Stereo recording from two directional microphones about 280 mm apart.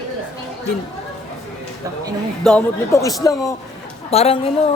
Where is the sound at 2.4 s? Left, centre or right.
Centre.